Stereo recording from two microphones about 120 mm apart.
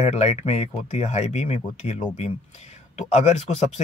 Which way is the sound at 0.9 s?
75° left (ahead or behind).